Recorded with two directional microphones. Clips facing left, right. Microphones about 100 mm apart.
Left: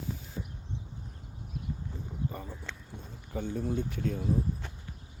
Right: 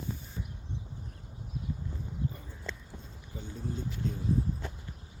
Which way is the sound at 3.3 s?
60° left (ahead or behind).